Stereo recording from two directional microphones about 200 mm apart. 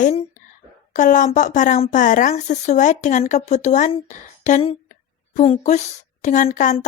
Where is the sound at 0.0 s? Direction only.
30° left (ahead or behind).